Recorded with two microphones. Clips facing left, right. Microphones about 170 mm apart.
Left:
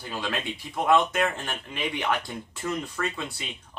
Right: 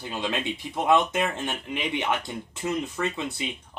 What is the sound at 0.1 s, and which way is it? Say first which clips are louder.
Speech: right 2 dB; 20° right (ahead or behind).